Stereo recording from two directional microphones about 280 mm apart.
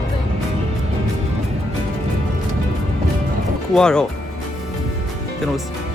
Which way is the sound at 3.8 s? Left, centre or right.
Centre.